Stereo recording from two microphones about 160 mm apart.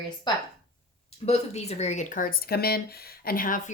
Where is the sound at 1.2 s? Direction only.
40° left (ahead or behind).